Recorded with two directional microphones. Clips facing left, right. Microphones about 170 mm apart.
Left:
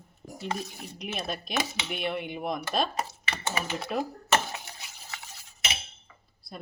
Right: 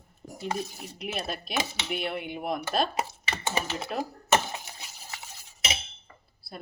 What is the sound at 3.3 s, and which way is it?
Computer keyboard, 30° right (ahead or behind).